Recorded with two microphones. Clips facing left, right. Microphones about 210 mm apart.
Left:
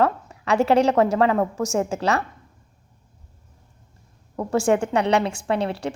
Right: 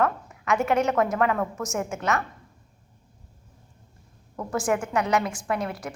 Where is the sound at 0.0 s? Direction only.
30° left (ahead or behind).